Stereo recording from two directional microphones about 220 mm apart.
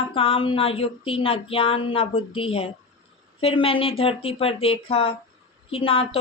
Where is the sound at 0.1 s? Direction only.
25° left (ahead or behind).